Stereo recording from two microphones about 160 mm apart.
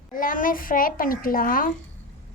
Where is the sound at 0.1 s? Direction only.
60° left (ahead or behind).